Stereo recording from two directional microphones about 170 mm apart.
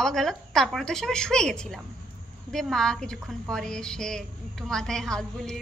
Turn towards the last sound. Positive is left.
turn(degrees=5)  # may be behind; listen again after turning